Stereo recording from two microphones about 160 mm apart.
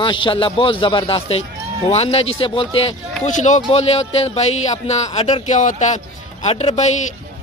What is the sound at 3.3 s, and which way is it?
Speech, 50° left (ahead or behind).